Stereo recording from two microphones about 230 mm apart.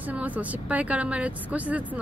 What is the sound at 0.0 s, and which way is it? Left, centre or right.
A woman's voice, centre.